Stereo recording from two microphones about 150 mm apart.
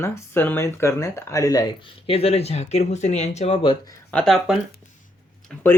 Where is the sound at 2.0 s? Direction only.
40° left (ahead or behind).